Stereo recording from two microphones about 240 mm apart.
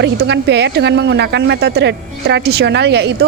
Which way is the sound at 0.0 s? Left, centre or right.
Right.